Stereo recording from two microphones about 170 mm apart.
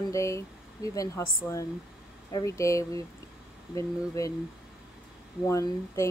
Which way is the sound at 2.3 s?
20° left (ahead or behind).